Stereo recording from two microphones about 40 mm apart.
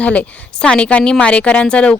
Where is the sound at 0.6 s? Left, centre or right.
Left.